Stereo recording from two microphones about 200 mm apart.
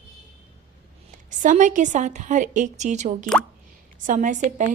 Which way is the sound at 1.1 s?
40° right (ahead or behind).